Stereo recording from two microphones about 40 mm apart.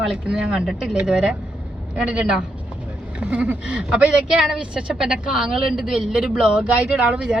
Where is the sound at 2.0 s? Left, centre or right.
Right.